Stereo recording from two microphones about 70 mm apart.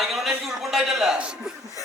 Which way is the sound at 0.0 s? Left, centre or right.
Centre.